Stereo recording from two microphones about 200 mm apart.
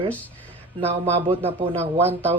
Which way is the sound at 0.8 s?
30° right (ahead or behind).